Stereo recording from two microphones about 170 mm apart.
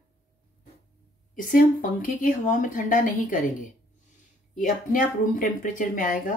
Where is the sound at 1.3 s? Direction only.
50° left (ahead or behind).